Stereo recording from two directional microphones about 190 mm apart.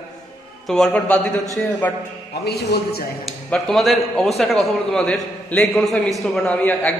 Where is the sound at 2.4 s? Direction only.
60° left (ahead or behind).